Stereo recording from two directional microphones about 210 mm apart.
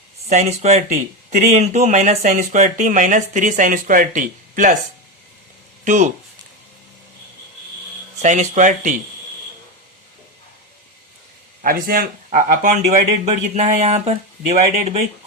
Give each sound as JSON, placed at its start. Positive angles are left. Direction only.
{"t": 0.3, "sound": "speech", "side_deg": -30}
{"t": 5.8, "sound": "speech", "side_deg": -35}
{"t": 8.2, "sound": "speech", "side_deg": -35}
{"t": 11.6, "sound": "speech", "side_deg": -45}